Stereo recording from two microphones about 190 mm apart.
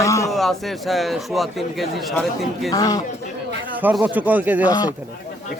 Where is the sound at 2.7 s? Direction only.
20° left (ahead or behind).